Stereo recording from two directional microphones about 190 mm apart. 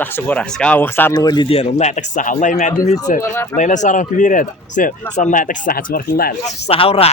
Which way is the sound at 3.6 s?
40° left (ahead or behind).